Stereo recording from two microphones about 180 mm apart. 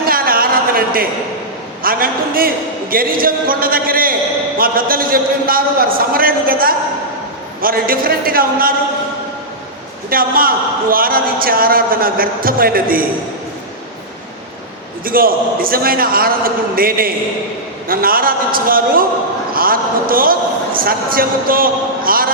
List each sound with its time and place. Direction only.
0.0 s a sound: 55° right (ahead or behind)
1.8 s a man's voice: 55° right (ahead or behind)
10.1 s a man's voice: 55° right (ahead or behind)
15.0 s a man's voice: 55° right (ahead or behind)